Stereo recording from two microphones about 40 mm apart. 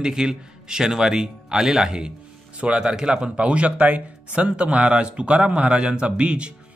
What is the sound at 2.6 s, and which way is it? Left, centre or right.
Speech, right.